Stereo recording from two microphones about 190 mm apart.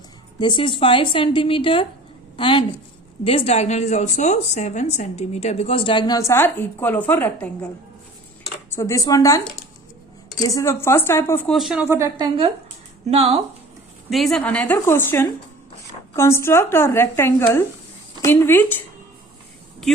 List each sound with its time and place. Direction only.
0.3 s a woman's voice: 25° left (ahead or behind); by 7.7 s 10° left (ahead or behind)
8.7 s speech: 15° left (ahead or behind)
11.5 s speech: 5° right (ahead or behind)
13.1 s speech: 30° right (ahead or behind)
14.1 s speech: centre (ahead or behind)